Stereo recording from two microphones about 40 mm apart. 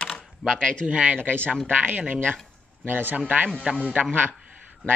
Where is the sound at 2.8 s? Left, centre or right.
Right.